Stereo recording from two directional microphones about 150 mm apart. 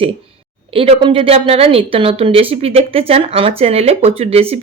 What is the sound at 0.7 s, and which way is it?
A woman's voice, 35° right (ahead or behind).